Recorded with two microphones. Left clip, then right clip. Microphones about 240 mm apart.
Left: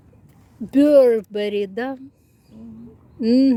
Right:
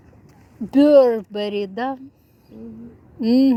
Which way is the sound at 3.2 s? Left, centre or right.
Centre.